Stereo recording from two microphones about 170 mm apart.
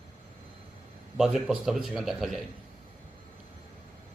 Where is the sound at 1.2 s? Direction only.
Centre (ahead or behind).